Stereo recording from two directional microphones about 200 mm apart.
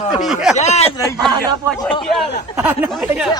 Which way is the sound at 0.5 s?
35° left (ahead or behind).